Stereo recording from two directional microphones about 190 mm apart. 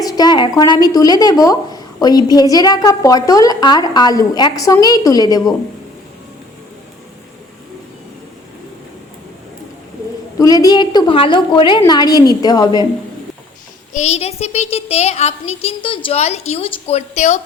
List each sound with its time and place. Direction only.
0.0 s a woman's voice: 20° left (ahead or behind)
10.3 s a woman's voice: 20° left (ahead or behind)
13.9 s speech: 35° left (ahead or behind)